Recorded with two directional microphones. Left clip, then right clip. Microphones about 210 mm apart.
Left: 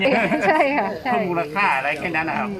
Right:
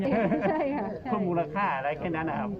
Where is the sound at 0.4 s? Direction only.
60° left (ahead or behind).